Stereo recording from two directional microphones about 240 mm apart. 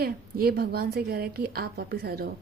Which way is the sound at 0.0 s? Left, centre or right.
Right.